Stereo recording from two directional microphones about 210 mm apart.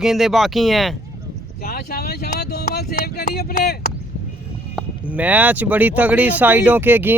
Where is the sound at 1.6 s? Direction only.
45° left (ahead or behind).